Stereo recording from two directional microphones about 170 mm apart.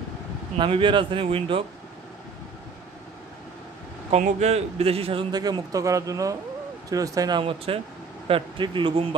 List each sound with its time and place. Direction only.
0.6 s speech: 30° right (ahead or behind)
4.1 s a man's voice: 40° right (ahead or behind)